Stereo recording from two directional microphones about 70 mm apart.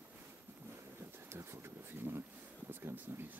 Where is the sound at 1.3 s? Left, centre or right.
Right.